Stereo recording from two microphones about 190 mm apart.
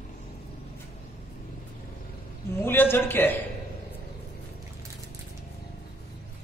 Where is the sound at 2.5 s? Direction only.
10° left (ahead or behind).